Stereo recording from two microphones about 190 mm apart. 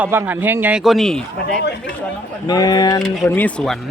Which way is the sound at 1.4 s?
60° left (ahead or behind).